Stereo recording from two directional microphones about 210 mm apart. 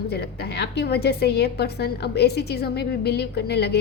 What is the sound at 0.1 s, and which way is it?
A woman's voice, 50° left (ahead or behind).